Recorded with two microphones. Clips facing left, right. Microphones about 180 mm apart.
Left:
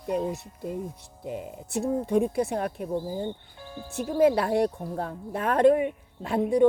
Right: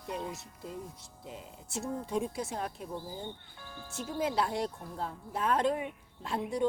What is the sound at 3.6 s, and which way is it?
Music, 25° left (ahead or behind).